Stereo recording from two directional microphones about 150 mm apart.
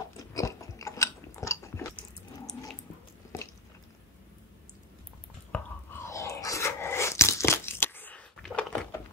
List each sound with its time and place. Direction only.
0.3 s chewing: 20° left (ahead or behind)
5.5 s biting: 20° left (ahead or behind)